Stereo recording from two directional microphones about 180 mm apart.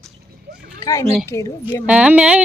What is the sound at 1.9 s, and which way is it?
Speech, 5° right (ahead or behind).